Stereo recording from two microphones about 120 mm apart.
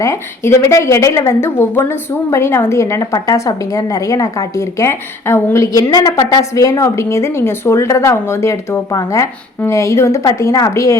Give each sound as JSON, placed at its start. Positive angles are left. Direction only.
{"t": 0.0, "sound": "a woman's voice", "side_deg": 25}
{"t": 5.7, "sound": "a woman's voice", "side_deg": 30}